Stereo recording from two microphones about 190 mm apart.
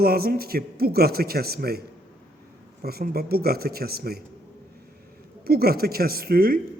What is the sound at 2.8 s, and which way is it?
Speech, 55° right (ahead or behind).